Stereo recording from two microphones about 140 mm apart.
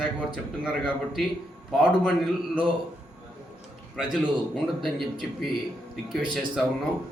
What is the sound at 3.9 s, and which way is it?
A man's voice, centre (ahead or behind).